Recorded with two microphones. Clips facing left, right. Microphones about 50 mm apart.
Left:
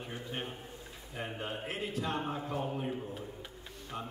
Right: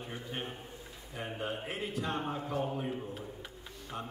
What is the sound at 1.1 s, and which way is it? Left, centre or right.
A man's voice, centre.